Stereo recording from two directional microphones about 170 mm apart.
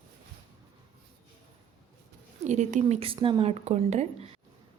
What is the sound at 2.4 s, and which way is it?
A woman's voice, 45° right (ahead or behind).